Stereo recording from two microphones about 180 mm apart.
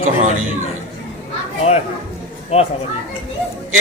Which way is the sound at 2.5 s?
35° left (ahead or behind).